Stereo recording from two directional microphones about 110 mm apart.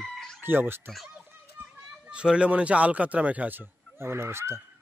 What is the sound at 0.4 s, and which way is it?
Speech, 20° right (ahead or behind).